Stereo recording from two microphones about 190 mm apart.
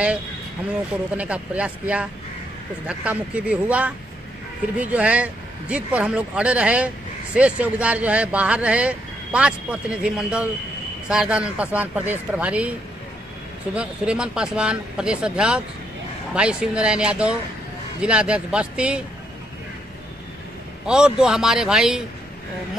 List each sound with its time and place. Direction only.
1.1 s speech: 5° right (ahead or behind)
13.7 s speech: 5° right (ahead or behind)
20.8 s speech: 5° right (ahead or behind)